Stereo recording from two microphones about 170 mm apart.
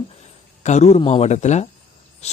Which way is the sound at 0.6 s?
40° left (ahead or behind).